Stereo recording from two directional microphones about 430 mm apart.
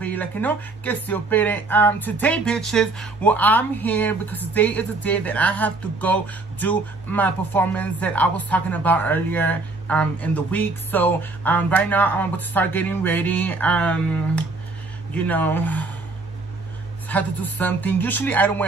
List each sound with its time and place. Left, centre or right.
0.0 s speech: centre
17.1 s speech: centre